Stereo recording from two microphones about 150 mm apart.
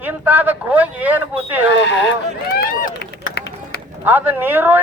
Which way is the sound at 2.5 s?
75° left (ahead or behind).